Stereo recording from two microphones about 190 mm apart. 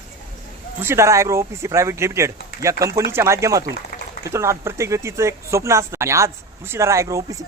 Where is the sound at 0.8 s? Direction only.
15° right (ahead or behind).